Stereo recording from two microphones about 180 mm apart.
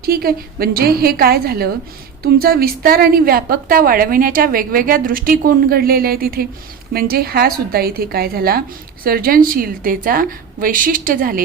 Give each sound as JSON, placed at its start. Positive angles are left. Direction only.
{"t": 0.0, "sound": "a woman's voice", "side_deg": -55}